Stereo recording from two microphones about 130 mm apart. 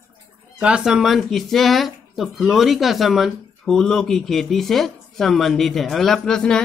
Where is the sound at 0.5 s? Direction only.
5° right (ahead or behind).